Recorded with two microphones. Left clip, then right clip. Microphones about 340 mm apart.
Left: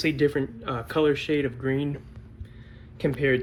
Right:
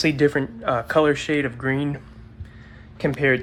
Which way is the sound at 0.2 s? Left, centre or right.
Centre.